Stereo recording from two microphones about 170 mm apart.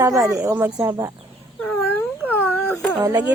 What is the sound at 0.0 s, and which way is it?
Speech, 20° right (ahead or behind).